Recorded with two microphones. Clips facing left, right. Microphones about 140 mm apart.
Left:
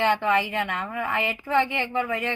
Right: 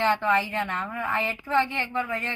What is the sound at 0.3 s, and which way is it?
Speech, 15° left (ahead or behind).